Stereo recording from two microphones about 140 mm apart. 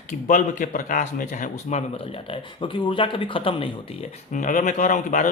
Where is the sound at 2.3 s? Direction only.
35° left (ahead or behind).